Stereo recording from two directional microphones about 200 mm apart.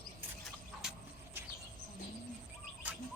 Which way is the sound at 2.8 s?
5° right (ahead or behind).